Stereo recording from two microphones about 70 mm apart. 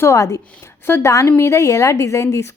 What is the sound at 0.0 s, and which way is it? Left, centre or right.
Speech, left.